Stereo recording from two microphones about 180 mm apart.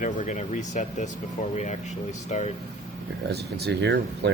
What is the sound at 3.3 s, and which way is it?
Speech, 65° right (ahead or behind).